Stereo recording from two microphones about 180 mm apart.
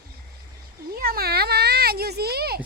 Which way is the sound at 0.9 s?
60° right (ahead or behind).